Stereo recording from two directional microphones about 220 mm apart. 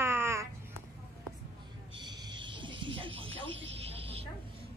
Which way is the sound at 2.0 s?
20° right (ahead or behind).